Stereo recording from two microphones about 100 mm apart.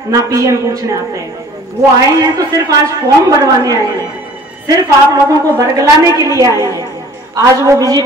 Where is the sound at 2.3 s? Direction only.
35° right (ahead or behind).